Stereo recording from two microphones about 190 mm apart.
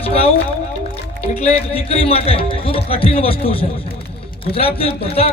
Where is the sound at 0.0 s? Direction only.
30° left (ahead or behind).